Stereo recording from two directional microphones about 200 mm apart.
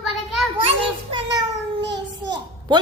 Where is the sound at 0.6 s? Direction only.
25° right (ahead or behind).